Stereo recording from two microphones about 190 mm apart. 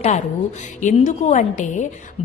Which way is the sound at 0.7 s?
40° left (ahead or behind).